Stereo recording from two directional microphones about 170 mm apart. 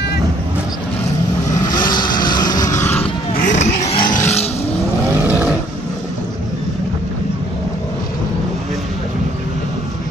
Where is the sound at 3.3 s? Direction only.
60° left (ahead or behind).